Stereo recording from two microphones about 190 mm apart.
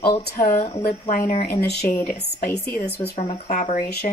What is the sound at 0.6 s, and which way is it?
Speech, 30° left (ahead or behind).